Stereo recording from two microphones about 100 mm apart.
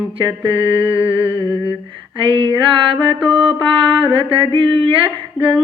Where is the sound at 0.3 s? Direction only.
60° right (ahead or behind).